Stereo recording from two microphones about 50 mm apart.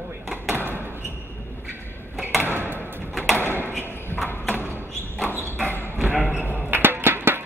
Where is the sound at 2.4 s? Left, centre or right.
Right.